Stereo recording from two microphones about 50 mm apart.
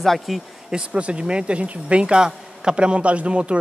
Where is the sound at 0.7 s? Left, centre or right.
Right.